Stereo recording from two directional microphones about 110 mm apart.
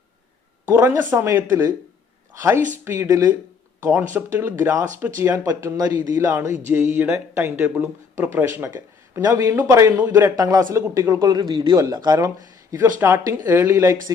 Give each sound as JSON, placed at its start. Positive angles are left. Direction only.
{"t": 0.7, "sound": "speech", "side_deg": -20}
{"t": 5.5, "sound": "a man's voice", "side_deg": -30}
{"t": 6.1, "sound": "a man's voice", "side_deg": -20}
{"t": 11.8, "sound": "a man's voice", "side_deg": -35}